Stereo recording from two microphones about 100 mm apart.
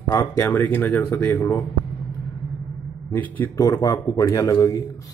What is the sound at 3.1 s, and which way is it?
Speech, 20° left (ahead or behind).